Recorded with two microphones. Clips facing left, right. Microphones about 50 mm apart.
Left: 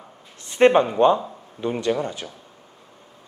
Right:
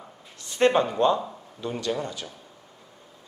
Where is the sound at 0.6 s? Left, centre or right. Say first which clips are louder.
Left 5 dB; left.